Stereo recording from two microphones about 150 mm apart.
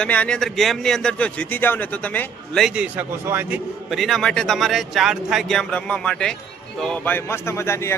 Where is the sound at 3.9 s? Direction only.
Centre (ahead or behind); by 7.9 s 15° left (ahead or behind).